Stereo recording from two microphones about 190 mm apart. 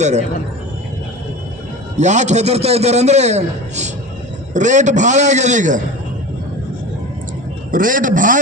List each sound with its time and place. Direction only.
0.0 s a man's voice: 35° right (ahead or behind)
2.0 s a man's voice: 40° right (ahead or behind)
7.7 s a man's voice: 45° right (ahead or behind)